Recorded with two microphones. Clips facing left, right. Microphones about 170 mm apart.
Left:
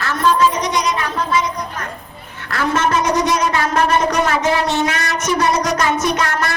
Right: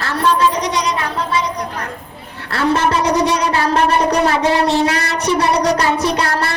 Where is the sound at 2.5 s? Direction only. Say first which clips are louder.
Right 2 dB; 35° right (ahead or behind).